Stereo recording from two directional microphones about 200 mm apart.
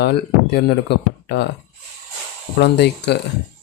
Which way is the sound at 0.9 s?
55° left (ahead or behind).